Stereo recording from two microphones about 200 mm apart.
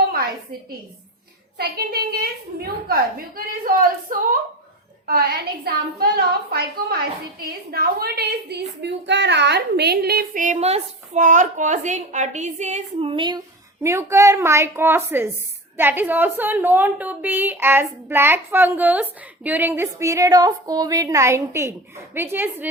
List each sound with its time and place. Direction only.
1.5 s a woman's voice: 50° right (ahead or behind); by 22.7 s 10° right (ahead or behind)